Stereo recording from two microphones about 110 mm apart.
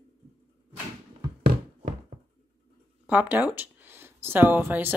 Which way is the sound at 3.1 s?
15° right (ahead or behind).